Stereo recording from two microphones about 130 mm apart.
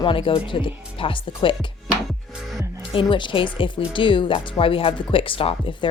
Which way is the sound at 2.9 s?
40° left (ahead or behind).